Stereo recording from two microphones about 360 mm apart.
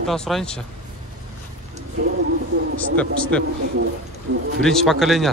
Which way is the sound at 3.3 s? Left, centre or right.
Centre.